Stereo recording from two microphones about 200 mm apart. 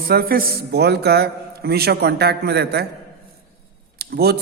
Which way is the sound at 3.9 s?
50° right (ahead or behind).